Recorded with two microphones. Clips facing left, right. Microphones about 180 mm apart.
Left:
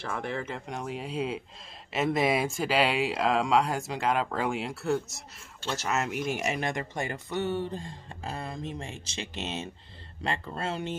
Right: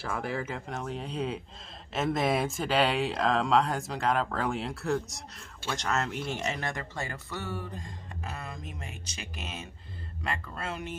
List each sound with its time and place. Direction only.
0.0 s speech: 5° right (ahead or behind); by 11.0 s 30° left (ahead or behind)